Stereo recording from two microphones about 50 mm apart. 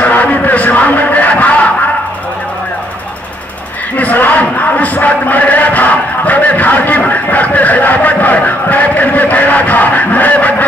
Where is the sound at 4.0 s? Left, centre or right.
Left.